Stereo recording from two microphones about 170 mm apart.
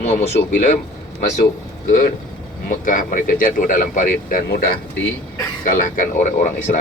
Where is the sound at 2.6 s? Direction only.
50° left (ahead or behind).